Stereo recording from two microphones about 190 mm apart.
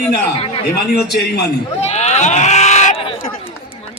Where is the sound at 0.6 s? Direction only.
60° left (ahead or behind).